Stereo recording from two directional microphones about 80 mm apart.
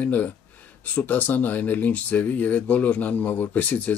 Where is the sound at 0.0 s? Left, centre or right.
Left.